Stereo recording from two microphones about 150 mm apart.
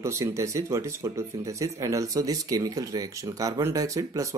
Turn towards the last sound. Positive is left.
turn(degrees=-20)  # may be behind; listen again after turning